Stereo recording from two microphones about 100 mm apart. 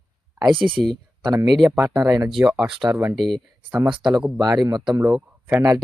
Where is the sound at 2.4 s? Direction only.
15° right (ahead or behind).